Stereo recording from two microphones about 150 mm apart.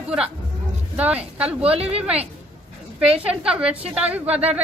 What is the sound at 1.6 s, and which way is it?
Speech, 40° right (ahead or behind).